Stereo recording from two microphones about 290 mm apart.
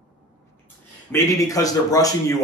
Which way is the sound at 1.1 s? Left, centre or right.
Centre.